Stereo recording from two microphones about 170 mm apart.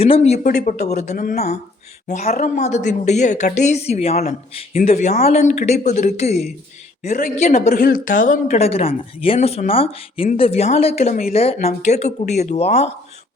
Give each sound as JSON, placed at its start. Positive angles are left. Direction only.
{"t": 0.0, "sound": "speech", "side_deg": 35}
{"t": 7.7, "sound": "speech", "side_deg": 65}